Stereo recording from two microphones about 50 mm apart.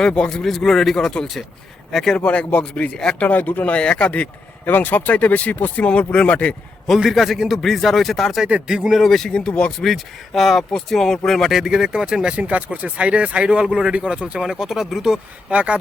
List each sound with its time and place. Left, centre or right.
0.0 s a man's voice: centre
2.1 s speech: left
4.6 s speech: left
5.8 s speech: left
6.8 s a man's voice: centre
8.4 s speech: right
8.7 s speech: centre
9.0 s a man's voice: centre
11.6 s speech: centre
12.4 s speech: right; by 15.2 s centre
15.4 s speech: right